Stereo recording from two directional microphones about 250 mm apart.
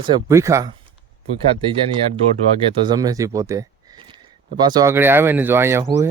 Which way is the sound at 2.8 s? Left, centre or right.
Centre.